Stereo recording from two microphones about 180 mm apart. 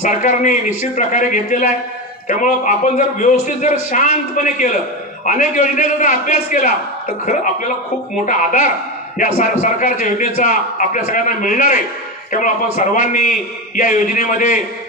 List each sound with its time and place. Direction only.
0.0 s a man's voice: 45° left (ahead or behind)
8.3 s a man's voice: 45° left (ahead or behind)